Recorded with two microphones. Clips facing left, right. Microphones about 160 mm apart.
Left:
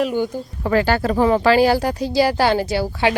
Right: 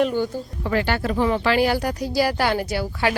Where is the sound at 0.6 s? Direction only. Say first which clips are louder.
Left 5 dB; 40° left (ahead or behind).